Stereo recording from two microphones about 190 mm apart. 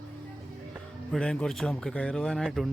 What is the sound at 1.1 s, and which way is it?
A man's voice, 5° left (ahead or behind).